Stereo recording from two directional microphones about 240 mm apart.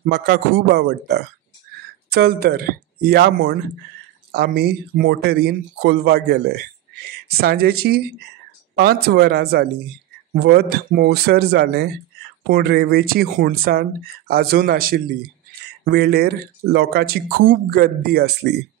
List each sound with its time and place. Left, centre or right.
0.0 s a man's voice: right